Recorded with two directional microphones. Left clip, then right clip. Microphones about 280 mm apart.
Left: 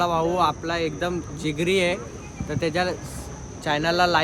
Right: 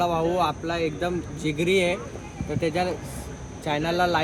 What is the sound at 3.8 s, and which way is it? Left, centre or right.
Speech, left.